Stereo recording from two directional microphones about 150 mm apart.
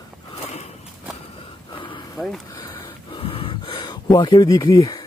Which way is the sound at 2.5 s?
25° left (ahead or behind).